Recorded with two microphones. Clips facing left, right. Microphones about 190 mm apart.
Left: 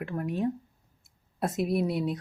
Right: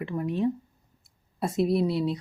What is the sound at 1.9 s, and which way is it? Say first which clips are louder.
Speech: right 2 dB; 50° left (ahead or behind).